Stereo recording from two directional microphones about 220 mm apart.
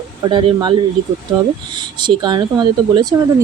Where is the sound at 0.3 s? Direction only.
20° right (ahead or behind).